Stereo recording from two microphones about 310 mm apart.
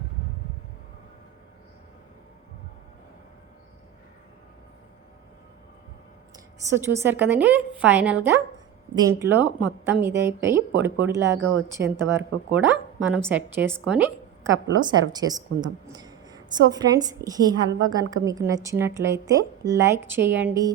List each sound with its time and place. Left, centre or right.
6.7 s a woman's voice: centre
11.8 s speech: right
12.1 s a woman's voice: centre